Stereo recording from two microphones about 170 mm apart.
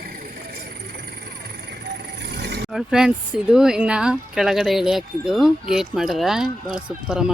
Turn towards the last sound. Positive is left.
turn(degrees=-5)  # may be behind; listen again after turning